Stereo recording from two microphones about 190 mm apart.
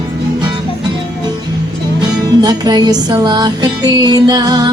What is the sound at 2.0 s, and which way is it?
Music, 20° right (ahead or behind).